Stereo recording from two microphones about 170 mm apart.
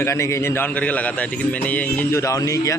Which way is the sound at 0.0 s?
15° left (ahead or behind).